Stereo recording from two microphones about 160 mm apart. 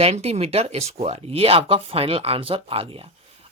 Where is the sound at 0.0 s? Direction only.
40° right (ahead or behind).